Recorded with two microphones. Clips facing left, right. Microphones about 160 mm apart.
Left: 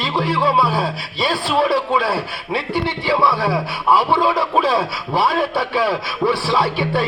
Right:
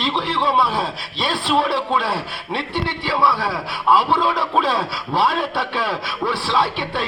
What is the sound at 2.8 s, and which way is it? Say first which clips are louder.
Speech: left 2 dB; 20° left (ahead or behind).